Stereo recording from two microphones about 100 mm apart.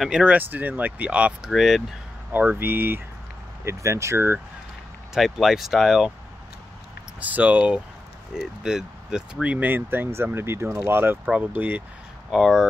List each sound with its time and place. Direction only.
0.0 s speech: 10° right (ahead or behind)
1.5 s speech: centre (ahead or behind)
2.3 s speech: 20° right (ahead or behind)
5.1 s speech: centre (ahead or behind)
7.2 s speech: 15° right (ahead or behind)
12.3 s speech: centre (ahead or behind)